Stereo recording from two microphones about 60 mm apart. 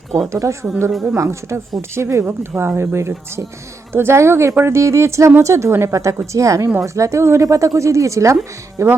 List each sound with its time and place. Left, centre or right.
0.3 s speech: right
0.9 s speech: centre
1.1 s speech: right
2.6 s speech: right